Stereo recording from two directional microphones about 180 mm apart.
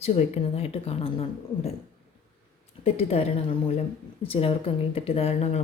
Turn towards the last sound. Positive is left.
turn(degrees=35)  # may be behind; listen again after turning